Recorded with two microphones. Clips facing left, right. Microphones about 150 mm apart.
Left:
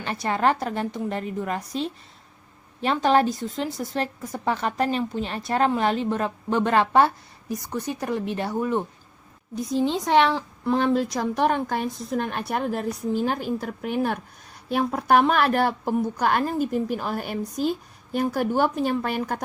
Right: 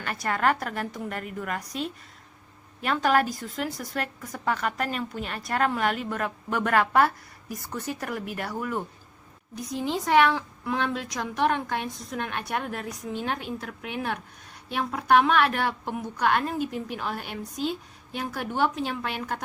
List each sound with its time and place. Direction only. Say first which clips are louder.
0.0 s a woman's voice: left 3 dB; 25° left (ahead or behind)
9.9 s speech: even; 5° right (ahead or behind)
10.8 s a woman's voice: left 8 dB; 40° left (ahead or behind)